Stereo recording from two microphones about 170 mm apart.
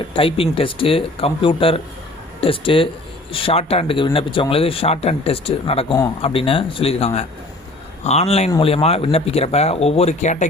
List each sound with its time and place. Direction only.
0.1 s speech: 30° left (ahead or behind)